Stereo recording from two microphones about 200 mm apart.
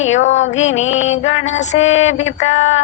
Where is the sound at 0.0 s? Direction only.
70° left (ahead or behind).